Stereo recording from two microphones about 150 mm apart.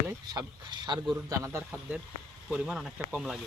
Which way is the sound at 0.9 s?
30° right (ahead or behind).